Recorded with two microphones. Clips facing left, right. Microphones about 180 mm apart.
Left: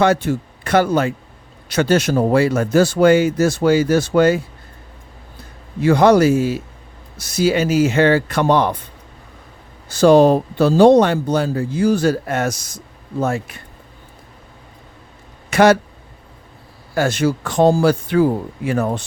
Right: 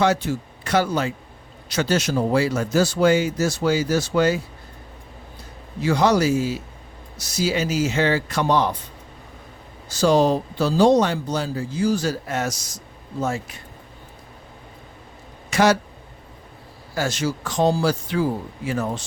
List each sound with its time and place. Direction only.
0.0 s a man's voice: 55° left (ahead or behind)
5.8 s a man's voice: 55° left (ahead or behind)
9.9 s a man's voice: 55° left (ahead or behind)
15.4 s a sound: 60° left (ahead or behind)
16.9 s a man's voice: 55° left (ahead or behind)